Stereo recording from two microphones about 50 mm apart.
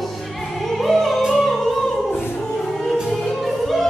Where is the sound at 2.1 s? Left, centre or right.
Left.